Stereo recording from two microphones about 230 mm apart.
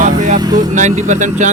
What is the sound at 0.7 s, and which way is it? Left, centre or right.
Speech, right.